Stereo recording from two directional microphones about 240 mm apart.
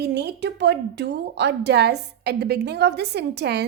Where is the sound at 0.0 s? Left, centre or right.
Right.